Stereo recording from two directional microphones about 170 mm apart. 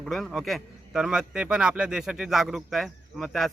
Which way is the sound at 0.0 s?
Centre (ahead or behind).